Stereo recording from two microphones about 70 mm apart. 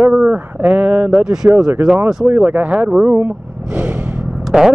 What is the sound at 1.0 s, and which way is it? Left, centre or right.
Speech, centre.